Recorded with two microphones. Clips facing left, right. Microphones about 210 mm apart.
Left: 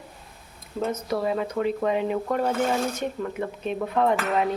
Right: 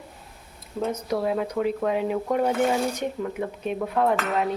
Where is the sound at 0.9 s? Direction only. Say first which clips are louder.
Right 1 dB; 10° right (ahead or behind).